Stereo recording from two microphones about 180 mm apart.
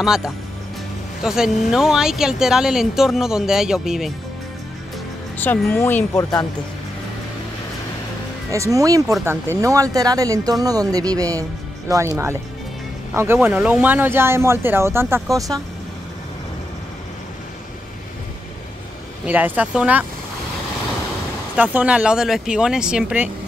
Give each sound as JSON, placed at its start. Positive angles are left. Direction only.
{"t": 0.0, "sound": "speech", "side_deg": -5}
{"t": 5.4, "sound": "speech", "side_deg": 10}
{"t": 8.5, "sound": "speech", "side_deg": -15}
{"t": 19.2, "sound": "speech", "side_deg": -10}
{"t": 21.5, "sound": "speech", "side_deg": -10}